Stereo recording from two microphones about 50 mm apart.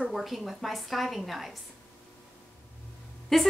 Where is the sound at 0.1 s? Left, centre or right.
Centre.